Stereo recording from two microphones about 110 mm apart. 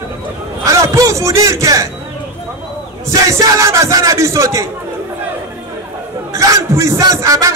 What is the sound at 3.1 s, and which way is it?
A man's voice, 30° right (ahead or behind).